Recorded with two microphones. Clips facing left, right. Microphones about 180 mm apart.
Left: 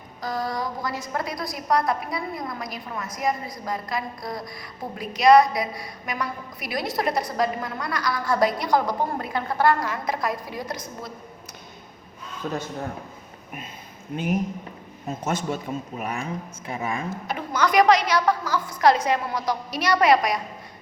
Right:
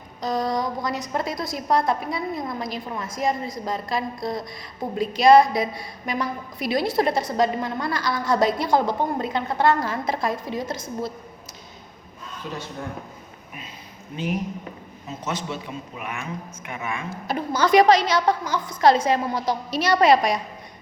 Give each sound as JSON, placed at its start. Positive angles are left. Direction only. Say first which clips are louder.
{"t": 0.2, "sound": "a woman's voice", "louder": "right 4 dB", "side_deg": -20}
{"t": 15.2, "sound": "a man's voice", "louder": "left 2 dB", "side_deg": 45}
{"t": 17.2, "sound": "a woman's voice", "louder": "right 3 dB", "side_deg": -35}